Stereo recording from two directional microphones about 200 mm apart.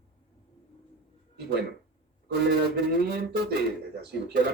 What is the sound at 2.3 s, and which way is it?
Speech, 55° right (ahead or behind).